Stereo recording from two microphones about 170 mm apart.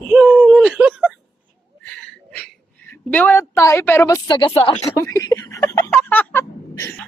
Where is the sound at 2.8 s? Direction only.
10° left (ahead or behind).